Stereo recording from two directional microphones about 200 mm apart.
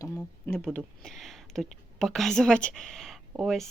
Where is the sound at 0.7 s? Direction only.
5° left (ahead or behind).